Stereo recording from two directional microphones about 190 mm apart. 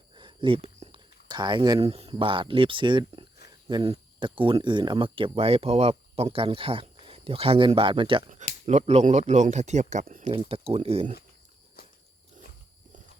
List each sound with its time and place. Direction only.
0.1 s speech: 25° right (ahead or behind); by 10.3 s 40° right (ahead or behind)
10.5 s speech: 30° right (ahead or behind)